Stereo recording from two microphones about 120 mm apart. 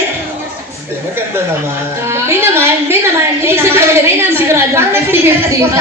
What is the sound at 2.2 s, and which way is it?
A woman's voice, 20° right (ahead or behind).